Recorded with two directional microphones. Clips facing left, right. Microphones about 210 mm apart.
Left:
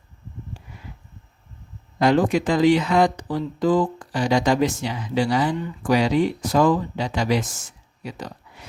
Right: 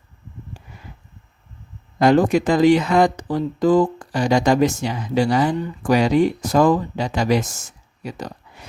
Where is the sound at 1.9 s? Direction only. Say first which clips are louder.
Right 3 dB; 45° right (ahead or behind).